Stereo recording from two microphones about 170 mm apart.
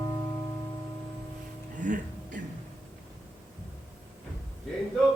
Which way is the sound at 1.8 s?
50° right (ahead or behind).